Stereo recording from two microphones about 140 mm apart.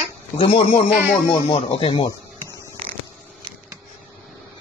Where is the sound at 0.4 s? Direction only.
45° left (ahead or behind).